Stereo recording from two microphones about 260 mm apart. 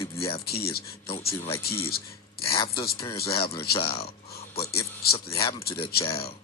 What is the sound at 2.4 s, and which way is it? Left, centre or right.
Speech, left.